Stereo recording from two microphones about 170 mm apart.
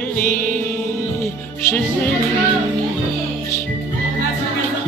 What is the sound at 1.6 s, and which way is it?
Speech, 10° left (ahead or behind).